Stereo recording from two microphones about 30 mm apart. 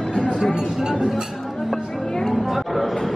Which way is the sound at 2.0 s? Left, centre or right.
Centre.